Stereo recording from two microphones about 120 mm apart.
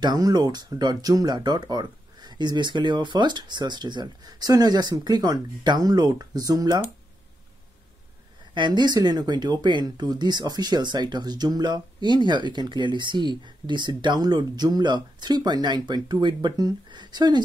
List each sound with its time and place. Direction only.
0.0 s speech: 35° right (ahead or behind)
8.5 s speech: 40° right (ahead or behind)